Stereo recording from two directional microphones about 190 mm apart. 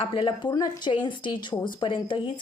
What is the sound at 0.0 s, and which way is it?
Speech, 25° left (ahead or behind).